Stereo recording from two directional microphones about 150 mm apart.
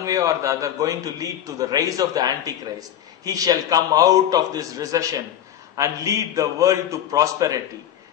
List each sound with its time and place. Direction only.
0.0 s a man's voice: 20° right (ahead or behind)